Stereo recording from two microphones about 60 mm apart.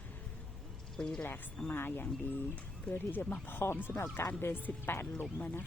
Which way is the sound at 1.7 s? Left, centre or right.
Left.